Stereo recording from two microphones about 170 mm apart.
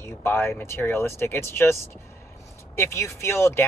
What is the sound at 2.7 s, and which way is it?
Speech, 15° left (ahead or behind).